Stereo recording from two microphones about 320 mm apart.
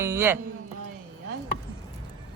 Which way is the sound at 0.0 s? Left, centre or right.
Centre.